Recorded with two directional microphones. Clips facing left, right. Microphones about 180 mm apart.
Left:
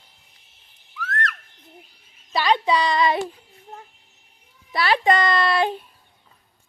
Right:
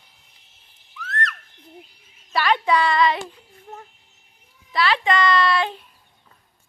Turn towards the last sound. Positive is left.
turn(degrees=45)  # may be behind; listen again after turning